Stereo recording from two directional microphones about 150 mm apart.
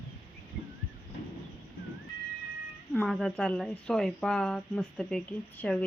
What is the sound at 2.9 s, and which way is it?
A woman's voice, centre (ahead or behind).